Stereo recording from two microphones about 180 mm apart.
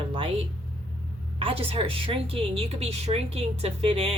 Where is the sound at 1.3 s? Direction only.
30° right (ahead or behind).